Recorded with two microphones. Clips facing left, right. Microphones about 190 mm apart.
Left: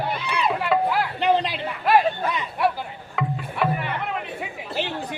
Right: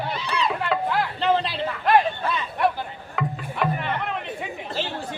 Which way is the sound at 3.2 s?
5° left (ahead or behind).